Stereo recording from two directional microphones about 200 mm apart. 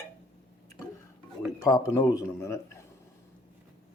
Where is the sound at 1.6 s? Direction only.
20° left (ahead or behind).